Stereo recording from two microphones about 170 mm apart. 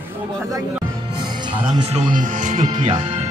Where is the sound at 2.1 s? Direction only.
50° right (ahead or behind).